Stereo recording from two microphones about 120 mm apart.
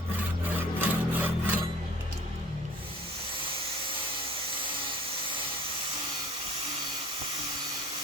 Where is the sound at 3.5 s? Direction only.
50° right (ahead or behind).